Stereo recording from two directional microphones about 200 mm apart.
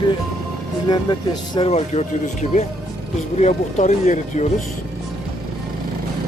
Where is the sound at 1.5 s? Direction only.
30° left (ahead or behind).